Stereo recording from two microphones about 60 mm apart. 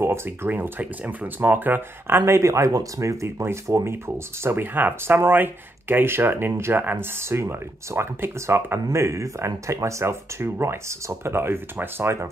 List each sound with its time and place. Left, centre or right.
0.0 s speech: right
0.5 s speech: right
3.9 s speech: right